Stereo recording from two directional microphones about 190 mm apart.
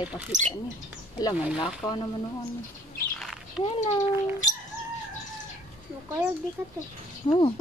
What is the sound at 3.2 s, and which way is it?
Bird, centre (ahead or behind).